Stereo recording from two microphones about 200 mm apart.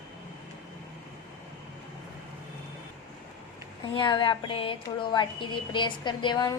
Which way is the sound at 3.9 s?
25° left (ahead or behind).